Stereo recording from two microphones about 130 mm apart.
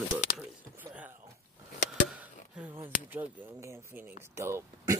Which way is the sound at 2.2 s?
10° right (ahead or behind).